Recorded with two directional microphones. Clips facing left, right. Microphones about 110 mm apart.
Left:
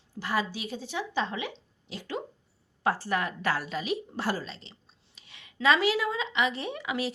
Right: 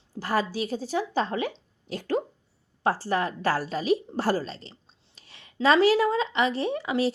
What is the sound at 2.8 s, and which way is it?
A woman's voice, 35° right (ahead or behind).